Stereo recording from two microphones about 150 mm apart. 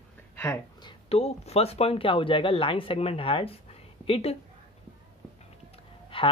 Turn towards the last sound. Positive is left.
turn(degrees=35)  # may be behind; listen again after turning